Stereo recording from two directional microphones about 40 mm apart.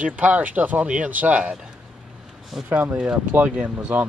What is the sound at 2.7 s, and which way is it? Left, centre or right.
Speech, right.